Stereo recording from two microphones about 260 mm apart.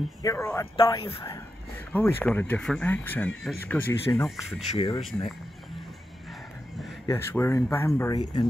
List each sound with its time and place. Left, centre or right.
0.2 s speech: centre
4.7 s speech: left
7.1 s speech: centre